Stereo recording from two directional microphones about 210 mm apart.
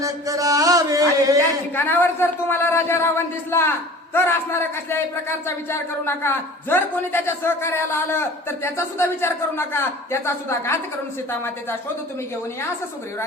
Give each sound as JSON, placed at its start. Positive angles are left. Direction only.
{"t": 0.0, "sound": "mantra", "side_deg": -15}
{"t": 1.7, "sound": "a man's voice", "side_deg": 10}